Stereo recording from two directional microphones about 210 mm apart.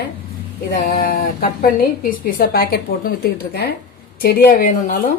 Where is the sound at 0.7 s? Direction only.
45° left (ahead or behind).